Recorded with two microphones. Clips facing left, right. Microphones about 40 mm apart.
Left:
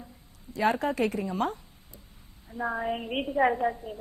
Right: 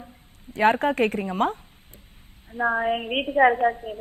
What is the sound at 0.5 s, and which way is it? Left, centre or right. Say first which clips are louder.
A woman's voice: right 6 dB; right.